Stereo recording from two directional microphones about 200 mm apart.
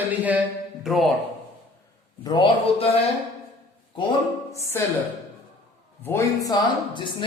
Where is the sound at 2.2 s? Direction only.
20° left (ahead or behind).